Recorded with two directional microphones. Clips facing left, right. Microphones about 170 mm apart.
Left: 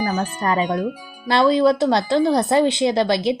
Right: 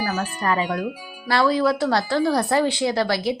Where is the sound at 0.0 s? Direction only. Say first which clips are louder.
Left 3 dB; 20° left (ahead or behind).